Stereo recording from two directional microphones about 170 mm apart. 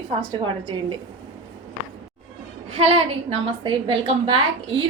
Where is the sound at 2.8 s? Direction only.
35° right (ahead or behind).